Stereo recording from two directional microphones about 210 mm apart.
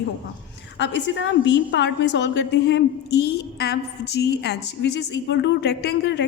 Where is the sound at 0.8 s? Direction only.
55° left (ahead or behind).